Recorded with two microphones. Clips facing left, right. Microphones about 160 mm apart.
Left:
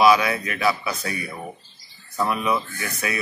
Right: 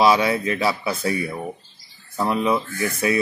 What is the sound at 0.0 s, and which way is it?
A man's voice, 25° right (ahead or behind).